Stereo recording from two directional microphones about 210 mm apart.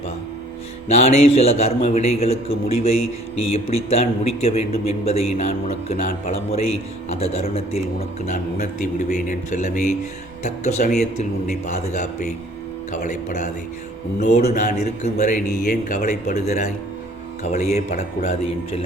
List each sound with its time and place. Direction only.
0.9 s a man's voice: 30° left (ahead or behind)